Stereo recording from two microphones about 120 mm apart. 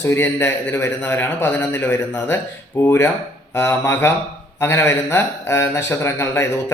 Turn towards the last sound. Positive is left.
turn(degrees=20)  # may be behind; listen again after turning